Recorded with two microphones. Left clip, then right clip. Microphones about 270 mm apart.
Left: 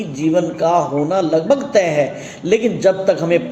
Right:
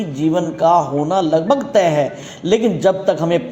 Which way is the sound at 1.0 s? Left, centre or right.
Right.